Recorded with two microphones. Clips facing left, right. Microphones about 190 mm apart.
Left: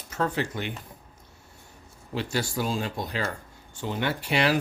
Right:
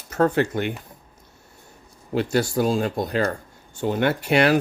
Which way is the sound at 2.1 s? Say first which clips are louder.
Right 8 dB; 45° right (ahead or behind).